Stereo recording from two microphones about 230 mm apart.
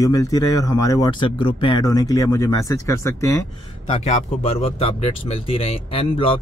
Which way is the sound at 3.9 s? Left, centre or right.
Left.